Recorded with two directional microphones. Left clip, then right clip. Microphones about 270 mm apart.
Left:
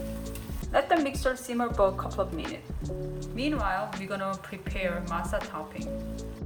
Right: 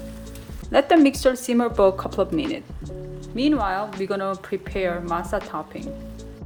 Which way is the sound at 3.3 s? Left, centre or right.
Right.